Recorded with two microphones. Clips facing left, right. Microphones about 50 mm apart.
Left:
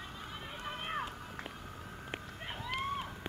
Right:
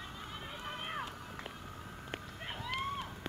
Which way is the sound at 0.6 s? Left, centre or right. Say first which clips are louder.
Left 3 dB; centre.